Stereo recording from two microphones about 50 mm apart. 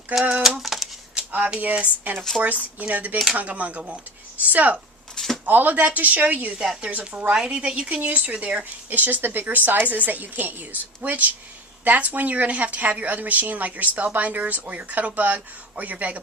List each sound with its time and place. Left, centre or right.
0.4 s a sound: centre
1.5 s speech: right
5.1 s a sound: centre
5.5 s speech: right
6.6 s a woman's voice: centre
7.1 s speech: right